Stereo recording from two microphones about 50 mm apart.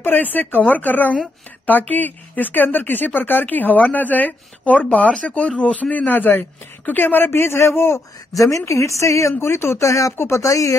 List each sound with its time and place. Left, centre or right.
0.0 s speech: left
7.3 s a man's voice: left
8.5 s a woman's voice: left
9.4 s a woman's voice: left